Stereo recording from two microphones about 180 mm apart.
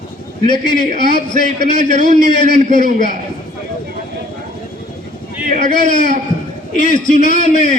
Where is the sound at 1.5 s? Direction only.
40° right (ahead or behind).